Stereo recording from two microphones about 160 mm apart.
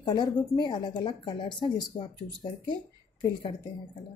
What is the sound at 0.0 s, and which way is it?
Speech, 25° left (ahead or behind).